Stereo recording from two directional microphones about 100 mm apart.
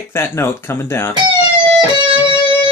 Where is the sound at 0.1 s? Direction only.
25° left (ahead or behind).